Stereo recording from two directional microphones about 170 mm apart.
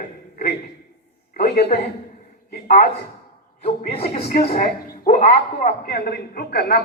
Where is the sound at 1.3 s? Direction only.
65° left (ahead or behind).